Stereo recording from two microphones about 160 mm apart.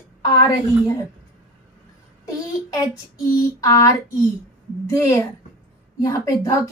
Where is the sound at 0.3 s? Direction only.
25° left (ahead or behind).